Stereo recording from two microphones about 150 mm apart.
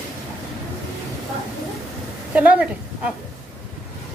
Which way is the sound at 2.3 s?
10° right (ahead or behind).